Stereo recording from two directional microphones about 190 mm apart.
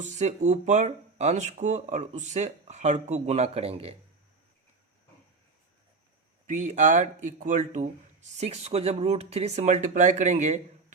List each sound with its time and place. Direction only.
0.0 s speech: 40° right (ahead or behind)
6.5 s speech: 40° right (ahead or behind)